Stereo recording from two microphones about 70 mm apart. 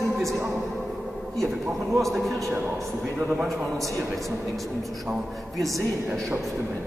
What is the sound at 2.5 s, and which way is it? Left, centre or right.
Speech, right.